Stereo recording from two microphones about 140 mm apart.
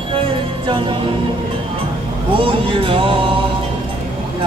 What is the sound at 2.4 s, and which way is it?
Music, 40° right (ahead or behind).